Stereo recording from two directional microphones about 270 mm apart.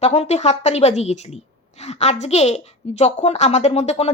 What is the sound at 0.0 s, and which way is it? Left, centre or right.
A child's voice, left.